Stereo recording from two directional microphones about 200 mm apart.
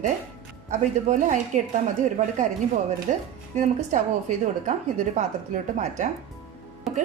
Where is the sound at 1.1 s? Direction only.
40° right (ahead or behind).